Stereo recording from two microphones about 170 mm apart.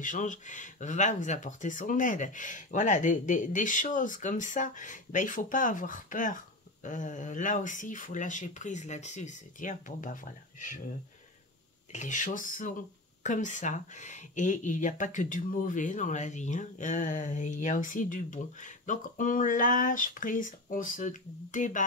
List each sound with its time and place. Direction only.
0.0 s speech: 50° left (ahead or behind)
11.9 s speech: 45° left (ahead or behind)